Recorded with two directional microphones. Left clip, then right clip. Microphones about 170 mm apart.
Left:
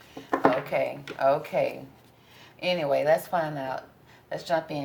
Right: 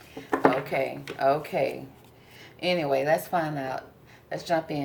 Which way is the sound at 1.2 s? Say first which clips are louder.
Left 1 dB; 35° left (ahead or behind).